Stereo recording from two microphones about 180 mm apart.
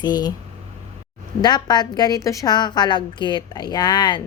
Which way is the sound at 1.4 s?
25° left (ahead or behind).